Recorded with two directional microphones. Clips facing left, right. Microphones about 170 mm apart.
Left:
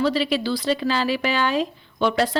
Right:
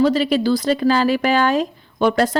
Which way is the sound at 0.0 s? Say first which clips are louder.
Right 5 dB; 45° right (ahead or behind).